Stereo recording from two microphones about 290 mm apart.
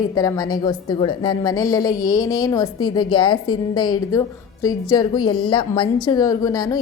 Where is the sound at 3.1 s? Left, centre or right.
Centre.